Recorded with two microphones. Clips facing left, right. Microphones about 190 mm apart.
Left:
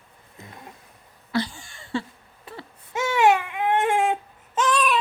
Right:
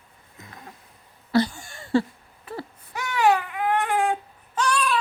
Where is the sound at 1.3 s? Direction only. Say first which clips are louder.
Right 5 dB; 45° right (ahead or behind).